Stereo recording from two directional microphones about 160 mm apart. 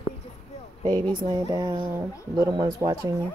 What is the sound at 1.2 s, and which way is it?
Speech, 25° right (ahead or behind).